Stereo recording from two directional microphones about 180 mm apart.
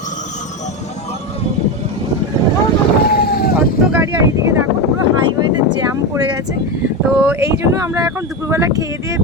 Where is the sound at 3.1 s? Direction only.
55° left (ahead or behind).